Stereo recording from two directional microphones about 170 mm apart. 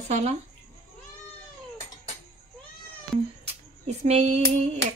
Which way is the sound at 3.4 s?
40° right (ahead or behind).